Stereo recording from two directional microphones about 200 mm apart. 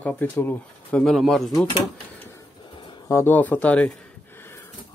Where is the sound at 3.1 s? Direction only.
10° left (ahead or behind).